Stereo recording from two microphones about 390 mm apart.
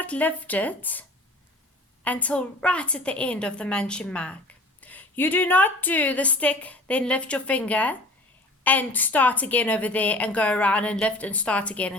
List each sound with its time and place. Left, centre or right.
0.0 s a woman's voice: centre
2.0 s a woman's voice: centre